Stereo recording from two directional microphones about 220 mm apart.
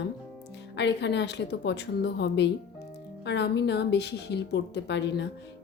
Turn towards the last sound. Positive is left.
turn(degrees=50)  # may be behind; listen again after turning